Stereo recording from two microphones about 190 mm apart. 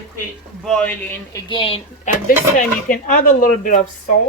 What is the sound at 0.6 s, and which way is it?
Speech, 5° left (ahead or behind).